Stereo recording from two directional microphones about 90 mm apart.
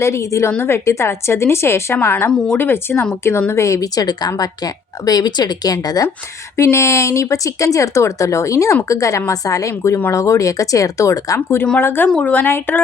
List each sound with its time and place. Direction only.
0.0 s a woman's voice: 30° left (ahead or behind)
6.6 s speech: 35° left (ahead or behind)
11.3 s a woman's voice: 25° left (ahead or behind)